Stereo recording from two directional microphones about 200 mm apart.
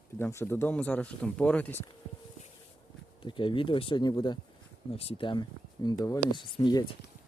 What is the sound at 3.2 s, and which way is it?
Speech, 25° left (ahead or behind).